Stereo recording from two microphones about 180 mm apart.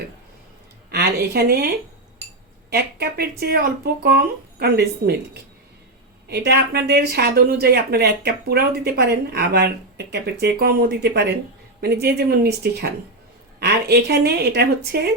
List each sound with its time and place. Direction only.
0.9 s speech: 65° right (ahead or behind)
6.2 s speech: 65° right (ahead or behind)